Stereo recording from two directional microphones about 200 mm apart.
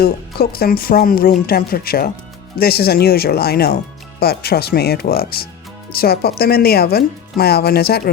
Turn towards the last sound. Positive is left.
turn(degrees=50)  # may be behind; listen again after turning